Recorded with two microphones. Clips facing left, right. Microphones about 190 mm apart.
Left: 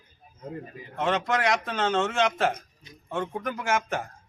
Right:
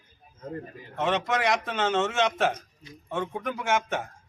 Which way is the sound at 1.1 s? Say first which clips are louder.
Left 1 dB; centre (ahead or behind).